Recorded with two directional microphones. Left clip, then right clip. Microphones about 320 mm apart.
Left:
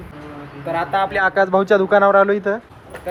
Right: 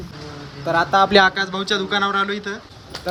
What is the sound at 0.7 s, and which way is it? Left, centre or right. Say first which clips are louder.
Speech: right 3 dB; centre.